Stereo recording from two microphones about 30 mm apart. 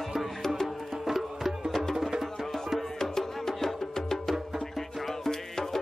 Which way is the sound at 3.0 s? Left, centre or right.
Centre.